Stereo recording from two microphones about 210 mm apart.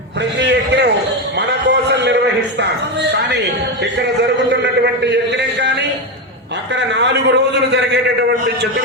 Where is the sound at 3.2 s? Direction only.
55° right (ahead or behind).